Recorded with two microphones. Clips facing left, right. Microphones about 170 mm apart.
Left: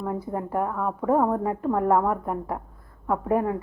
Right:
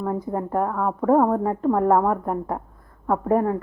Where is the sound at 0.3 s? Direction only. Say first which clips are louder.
Right 2 dB; 40° right (ahead or behind).